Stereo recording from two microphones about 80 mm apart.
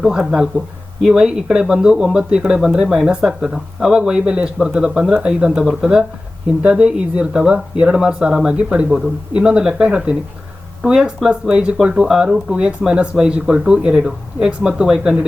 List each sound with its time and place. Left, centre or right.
0.0 s speech: centre